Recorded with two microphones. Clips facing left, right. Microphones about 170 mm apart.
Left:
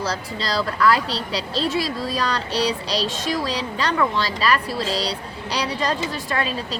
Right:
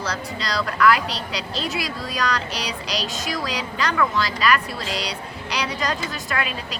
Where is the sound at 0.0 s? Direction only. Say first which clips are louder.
Left 2 dB; 30° left (ahead or behind).